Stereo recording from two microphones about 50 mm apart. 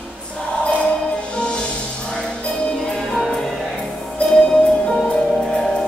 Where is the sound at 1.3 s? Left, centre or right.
Left.